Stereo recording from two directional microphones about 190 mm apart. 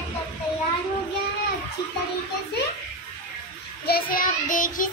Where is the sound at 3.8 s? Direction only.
50° left (ahead or behind).